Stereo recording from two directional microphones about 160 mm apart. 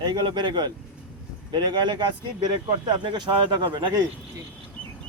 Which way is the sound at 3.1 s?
30° right (ahead or behind).